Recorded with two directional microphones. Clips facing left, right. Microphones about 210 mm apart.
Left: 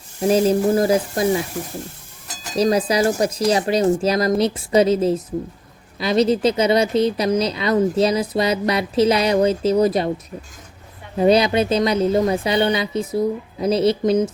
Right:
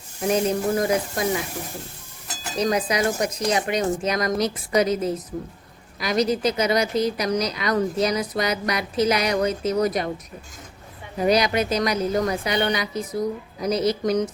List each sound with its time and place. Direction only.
0.2 s speech: 30° left (ahead or behind)
2.6 s speech: 30° left (ahead or behind)
11.2 s speech: 25° left (ahead or behind)